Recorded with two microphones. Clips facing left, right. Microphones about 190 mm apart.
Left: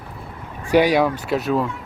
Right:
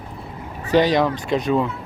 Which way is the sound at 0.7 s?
10° left (ahead or behind).